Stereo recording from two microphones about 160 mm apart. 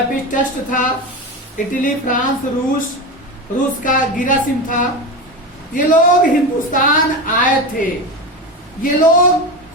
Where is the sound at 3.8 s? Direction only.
55° left (ahead or behind).